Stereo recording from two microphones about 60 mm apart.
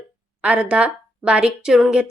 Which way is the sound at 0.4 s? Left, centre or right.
Centre.